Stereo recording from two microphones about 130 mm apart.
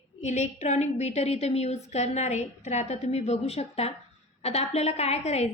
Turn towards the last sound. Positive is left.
turn(degrees=55)  # may be behind; listen again after turning